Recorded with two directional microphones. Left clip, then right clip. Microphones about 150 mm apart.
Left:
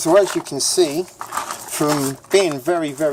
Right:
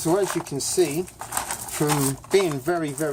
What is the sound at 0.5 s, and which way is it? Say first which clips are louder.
Speech: left 6 dB; 50° left (ahead or behind).